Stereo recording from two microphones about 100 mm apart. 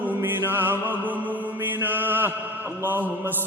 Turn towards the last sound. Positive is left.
turn(degrees=-20)  # may be behind; listen again after turning